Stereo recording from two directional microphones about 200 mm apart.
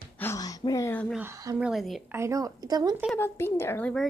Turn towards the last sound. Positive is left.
turn(degrees=5)  # may be behind; listen again after turning